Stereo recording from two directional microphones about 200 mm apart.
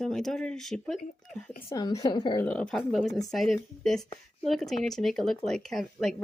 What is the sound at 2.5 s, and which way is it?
Speech, 5° left (ahead or behind).